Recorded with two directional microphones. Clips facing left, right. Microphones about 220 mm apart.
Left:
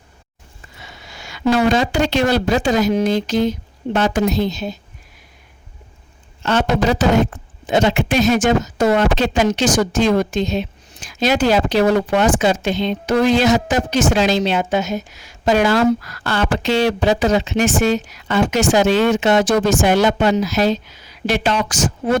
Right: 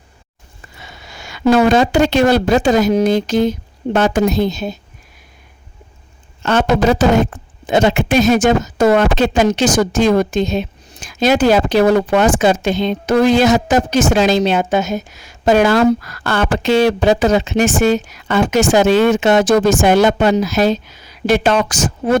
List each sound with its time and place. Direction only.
1.1 s speech: 50° right (ahead or behind)
6.4 s speech: 50° right (ahead or behind)